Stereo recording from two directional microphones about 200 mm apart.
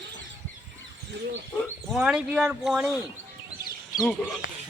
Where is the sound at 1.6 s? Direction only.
Centre (ahead or behind).